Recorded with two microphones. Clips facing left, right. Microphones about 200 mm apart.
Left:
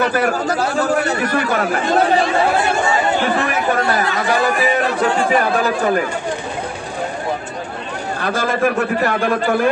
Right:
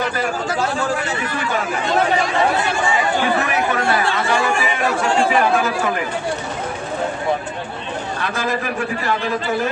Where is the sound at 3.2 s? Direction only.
45° left (ahead or behind).